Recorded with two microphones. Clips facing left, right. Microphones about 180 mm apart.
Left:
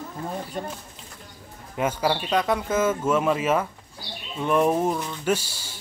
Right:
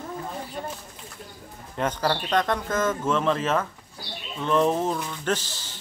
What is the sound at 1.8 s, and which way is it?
Speech, 10° left (ahead or behind).